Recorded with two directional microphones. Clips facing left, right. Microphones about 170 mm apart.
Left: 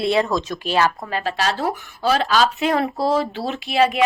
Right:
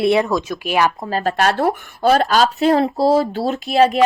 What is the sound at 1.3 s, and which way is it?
Speech, 55° right (ahead or behind).